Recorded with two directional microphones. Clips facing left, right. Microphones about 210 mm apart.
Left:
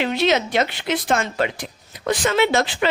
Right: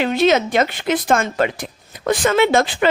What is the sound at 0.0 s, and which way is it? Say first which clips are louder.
A woman's voice: right 4 dB; 45° right (ahead or behind).